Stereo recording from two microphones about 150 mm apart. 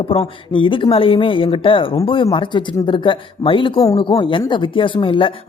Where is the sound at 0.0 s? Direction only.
35° left (ahead or behind).